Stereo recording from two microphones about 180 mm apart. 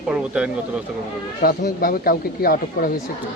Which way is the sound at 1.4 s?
55° left (ahead or behind).